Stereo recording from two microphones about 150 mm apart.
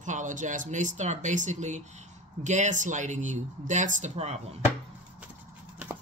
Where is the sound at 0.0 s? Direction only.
55° right (ahead or behind).